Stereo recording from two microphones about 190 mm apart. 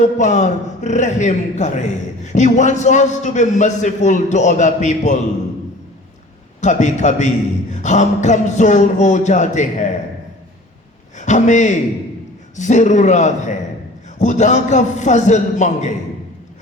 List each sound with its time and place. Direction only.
0.0 s a man's voice: 40° left (ahead or behind)
6.6 s a man's voice: 40° left (ahead or behind)
11.2 s a man's voice: 40° left (ahead or behind)